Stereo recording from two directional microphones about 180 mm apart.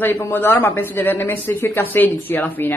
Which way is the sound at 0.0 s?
10° left (ahead or behind).